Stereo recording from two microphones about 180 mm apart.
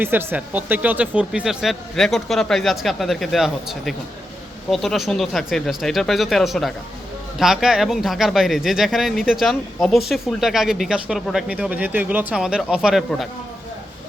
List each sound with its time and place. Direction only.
0.0 s speech: 10° right (ahead or behind)